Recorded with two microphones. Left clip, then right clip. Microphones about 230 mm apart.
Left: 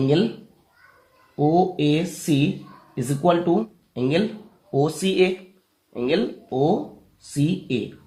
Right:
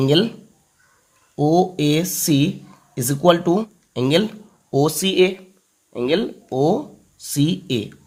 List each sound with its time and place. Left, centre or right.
1.4 s speech: right